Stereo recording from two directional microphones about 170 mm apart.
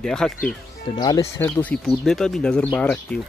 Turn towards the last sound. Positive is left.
turn(degrees=5)  # may be behind; listen again after turning